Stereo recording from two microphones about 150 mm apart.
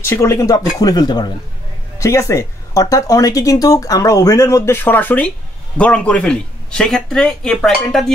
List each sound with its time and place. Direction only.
0.0 s speech: 20° left (ahead or behind); by 8.0 s centre (ahead or behind)